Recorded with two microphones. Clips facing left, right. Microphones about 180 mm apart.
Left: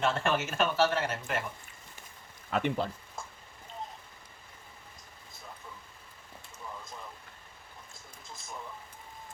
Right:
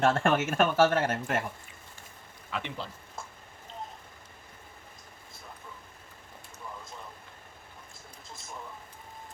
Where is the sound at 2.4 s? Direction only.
50° left (ahead or behind).